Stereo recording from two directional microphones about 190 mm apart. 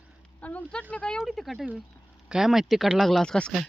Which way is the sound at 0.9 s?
5° left (ahead or behind).